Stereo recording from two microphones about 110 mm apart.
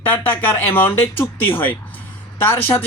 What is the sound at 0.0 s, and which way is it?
Speech, 15° left (ahead or behind).